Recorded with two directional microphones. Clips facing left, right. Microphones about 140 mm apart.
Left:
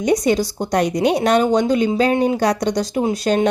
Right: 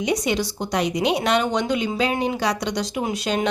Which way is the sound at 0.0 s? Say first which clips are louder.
Left 6 dB; 45° left (ahead or behind).